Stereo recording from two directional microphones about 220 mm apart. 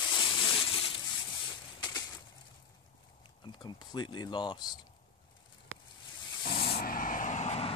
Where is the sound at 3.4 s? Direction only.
20° left (ahead or behind).